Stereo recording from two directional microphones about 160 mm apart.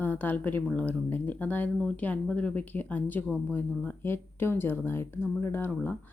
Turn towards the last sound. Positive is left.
turn(degrees=10)  # may be behind; listen again after turning